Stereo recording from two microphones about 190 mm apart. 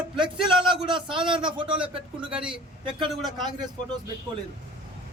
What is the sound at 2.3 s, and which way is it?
A man's voice, 5° right (ahead or behind).